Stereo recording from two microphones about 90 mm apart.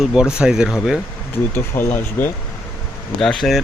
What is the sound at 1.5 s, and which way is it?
Speech, 25° left (ahead or behind).